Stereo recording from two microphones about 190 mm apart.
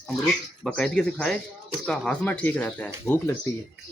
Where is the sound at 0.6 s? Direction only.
5° left (ahead or behind).